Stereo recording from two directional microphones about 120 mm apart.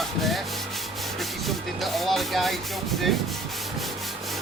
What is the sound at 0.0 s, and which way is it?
Rub, centre (ahead or behind).